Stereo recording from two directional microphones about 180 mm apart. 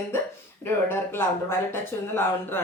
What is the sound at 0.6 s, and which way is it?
Speech, 15° left (ahead or behind).